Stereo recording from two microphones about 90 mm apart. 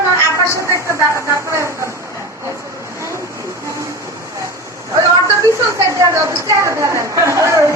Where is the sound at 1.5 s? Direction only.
30° right (ahead or behind).